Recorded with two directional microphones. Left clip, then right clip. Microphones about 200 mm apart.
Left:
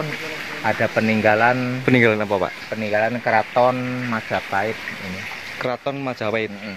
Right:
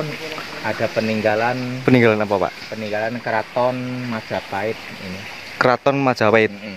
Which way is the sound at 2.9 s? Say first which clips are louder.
Left 3 dB; 50° left (ahead or behind).